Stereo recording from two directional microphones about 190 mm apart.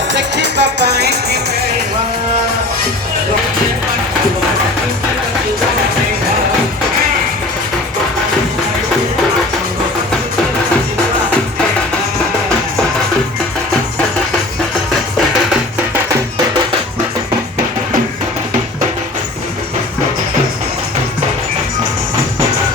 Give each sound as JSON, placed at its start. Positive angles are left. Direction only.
{"t": 0.1, "sound": "music", "side_deg": -65}